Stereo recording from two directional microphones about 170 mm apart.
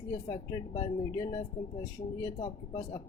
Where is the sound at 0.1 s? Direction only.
25° left (ahead or behind).